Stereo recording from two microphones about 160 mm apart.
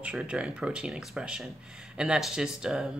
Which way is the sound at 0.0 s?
5° right (ahead or behind).